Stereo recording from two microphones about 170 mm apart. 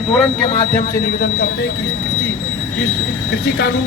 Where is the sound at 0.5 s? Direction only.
55° left (ahead or behind); by 1.7 s 70° left (ahead or behind).